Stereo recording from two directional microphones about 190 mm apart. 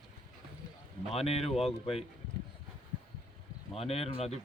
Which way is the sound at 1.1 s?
30° left (ahead or behind).